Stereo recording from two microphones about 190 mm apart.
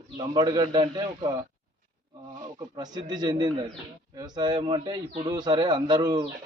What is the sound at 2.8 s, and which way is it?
Speech, 20° right (ahead or behind).